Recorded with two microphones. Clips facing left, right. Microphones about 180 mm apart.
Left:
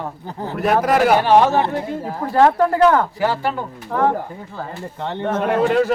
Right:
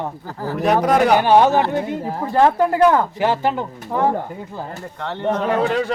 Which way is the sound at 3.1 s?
20° right (ahead or behind).